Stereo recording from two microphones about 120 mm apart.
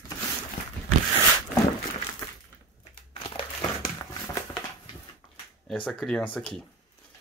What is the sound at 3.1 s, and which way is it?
Crushing, 50° left (ahead or behind).